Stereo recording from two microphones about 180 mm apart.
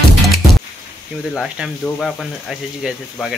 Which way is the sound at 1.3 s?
Centre (ahead or behind).